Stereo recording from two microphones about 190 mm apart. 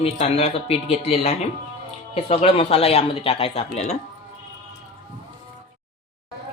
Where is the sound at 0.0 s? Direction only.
35° left (ahead or behind).